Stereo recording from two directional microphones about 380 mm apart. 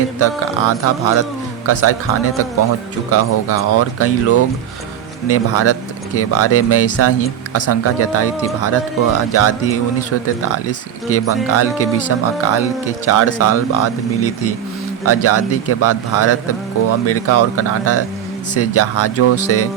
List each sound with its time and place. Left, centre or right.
0.2 s speech: left